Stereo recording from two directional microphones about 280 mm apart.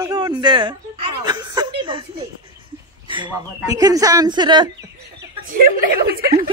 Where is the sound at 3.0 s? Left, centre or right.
Centre.